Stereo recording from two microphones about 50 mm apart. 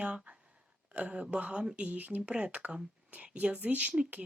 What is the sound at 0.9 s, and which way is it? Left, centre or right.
Speech, right.